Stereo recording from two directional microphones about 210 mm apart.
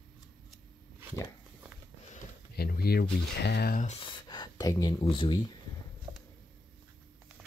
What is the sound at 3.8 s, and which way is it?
Speech, 30° left (ahead or behind).